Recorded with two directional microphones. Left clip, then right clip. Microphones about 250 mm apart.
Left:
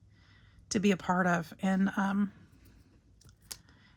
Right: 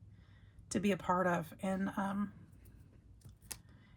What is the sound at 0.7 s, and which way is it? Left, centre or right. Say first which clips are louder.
Speech: left 4 dB; left.